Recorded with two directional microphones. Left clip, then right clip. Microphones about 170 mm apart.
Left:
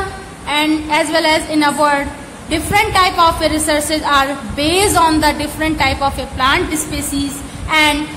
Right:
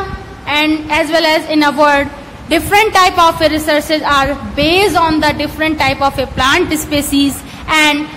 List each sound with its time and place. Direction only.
0.5 s a woman's voice: 15° right (ahead or behind)